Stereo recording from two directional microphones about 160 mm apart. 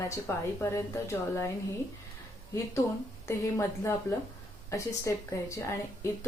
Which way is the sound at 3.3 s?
15° left (ahead or behind).